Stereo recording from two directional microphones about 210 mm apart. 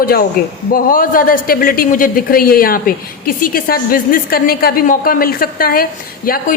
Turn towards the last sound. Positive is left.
turn(degrees=45)  # may be behind; listen again after turning